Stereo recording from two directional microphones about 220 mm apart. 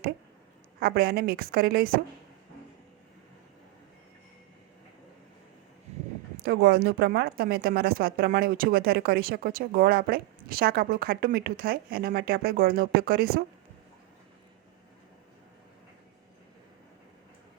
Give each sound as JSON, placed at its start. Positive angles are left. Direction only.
{"t": 0.8, "sound": "a woman's voice", "side_deg": -45}
{"t": 5.9, "sound": "a sound", "side_deg": -30}
{"t": 6.4, "sound": "a woman's voice", "side_deg": -45}